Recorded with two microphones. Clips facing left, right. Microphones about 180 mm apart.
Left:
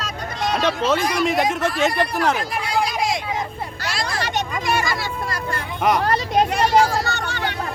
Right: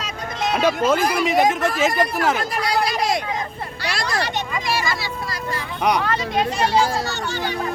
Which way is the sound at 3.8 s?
45° left (ahead or behind).